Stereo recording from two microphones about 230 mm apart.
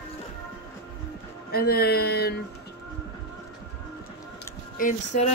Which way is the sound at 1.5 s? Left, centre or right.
Left.